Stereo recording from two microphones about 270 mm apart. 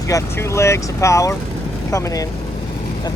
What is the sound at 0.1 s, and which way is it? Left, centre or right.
Speech, centre.